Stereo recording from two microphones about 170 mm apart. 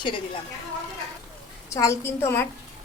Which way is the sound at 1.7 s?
15° left (ahead or behind).